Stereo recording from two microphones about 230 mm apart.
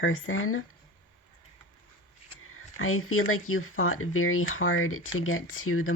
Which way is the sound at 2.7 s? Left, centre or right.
Left.